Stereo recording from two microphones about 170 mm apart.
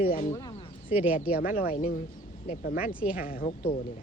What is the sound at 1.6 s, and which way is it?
Speech, 60° left (ahead or behind).